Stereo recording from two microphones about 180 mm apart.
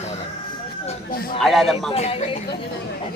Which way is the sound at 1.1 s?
55° left (ahead or behind).